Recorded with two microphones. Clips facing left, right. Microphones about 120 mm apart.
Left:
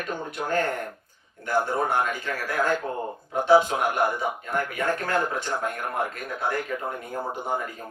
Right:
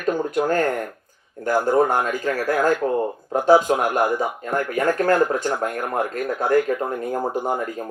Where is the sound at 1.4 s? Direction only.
40° right (ahead or behind).